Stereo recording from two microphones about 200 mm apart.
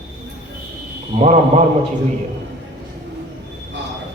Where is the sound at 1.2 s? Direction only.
35° right (ahead or behind).